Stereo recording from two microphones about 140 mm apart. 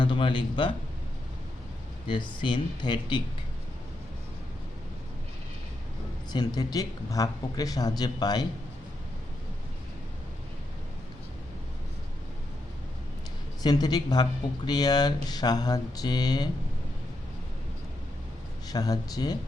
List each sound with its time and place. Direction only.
0.0 s speech: 35° left (ahead or behind)
2.0 s speech: 35° left (ahead or behind)
6.3 s speech: 30° left (ahead or behind)
13.6 s speech: 30° left (ahead or behind)
18.7 s speech: 25° left (ahead or behind)